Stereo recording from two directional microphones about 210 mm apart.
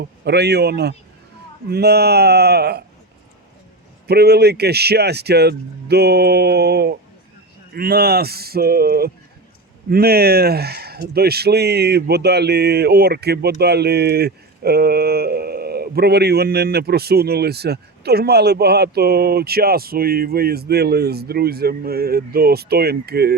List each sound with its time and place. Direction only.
0.0 s speech: 50° right (ahead or behind)
4.0 s speech: 50° right (ahead or behind)